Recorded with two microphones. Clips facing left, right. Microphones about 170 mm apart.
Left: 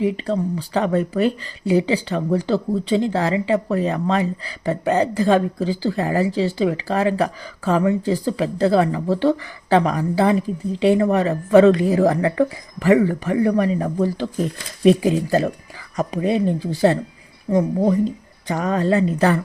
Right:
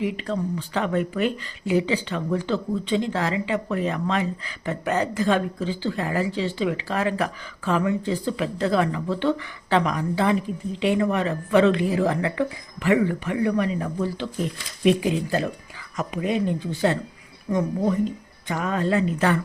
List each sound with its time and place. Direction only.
0.0 s speech: 35° left (ahead or behind)